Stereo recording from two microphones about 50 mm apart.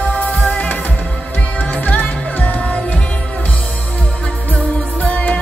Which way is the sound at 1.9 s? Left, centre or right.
Left.